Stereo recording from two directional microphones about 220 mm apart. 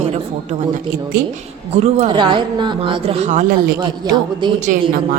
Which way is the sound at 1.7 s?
30° right (ahead or behind).